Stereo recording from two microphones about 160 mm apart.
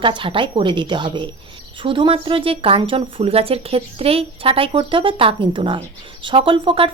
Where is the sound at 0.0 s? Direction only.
30° right (ahead or behind).